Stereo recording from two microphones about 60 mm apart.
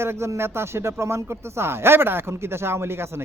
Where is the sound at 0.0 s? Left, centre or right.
Right.